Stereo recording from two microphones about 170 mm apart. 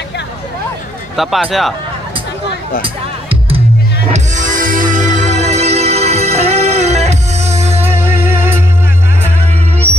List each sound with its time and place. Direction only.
1.1 s speech: centre (ahead or behind)
2.8 s music: 35° right (ahead or behind)
4.1 s music: 45° right (ahead or behind)